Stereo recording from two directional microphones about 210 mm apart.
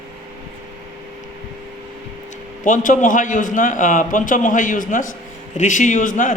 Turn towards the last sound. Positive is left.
turn(degrees=40)  # may be behind; listen again after turning